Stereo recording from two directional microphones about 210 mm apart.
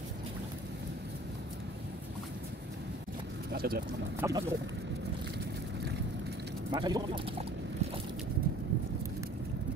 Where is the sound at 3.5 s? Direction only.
50° right (ahead or behind).